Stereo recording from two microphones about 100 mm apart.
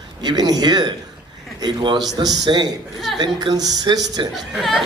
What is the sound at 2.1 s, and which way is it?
A man's voice, 45° right (ahead or behind).